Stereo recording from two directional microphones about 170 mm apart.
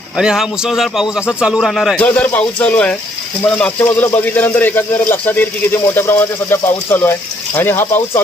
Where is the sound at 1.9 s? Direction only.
10° left (ahead or behind).